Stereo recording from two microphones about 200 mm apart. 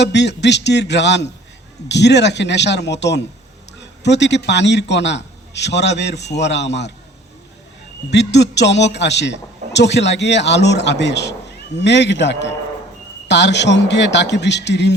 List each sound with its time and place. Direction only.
0.0 s a man's voice: 60° left (ahead or behind)
8.1 s a man's voice: 60° left (ahead or behind)